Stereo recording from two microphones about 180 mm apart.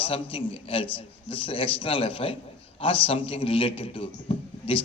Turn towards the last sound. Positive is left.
turn(degrees=30)  # may be behind; listen again after turning